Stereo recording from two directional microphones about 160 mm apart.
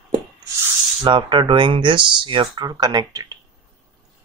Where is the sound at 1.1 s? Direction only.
30° right (ahead or behind).